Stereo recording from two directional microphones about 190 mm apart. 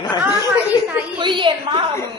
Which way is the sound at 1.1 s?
25° right (ahead or behind).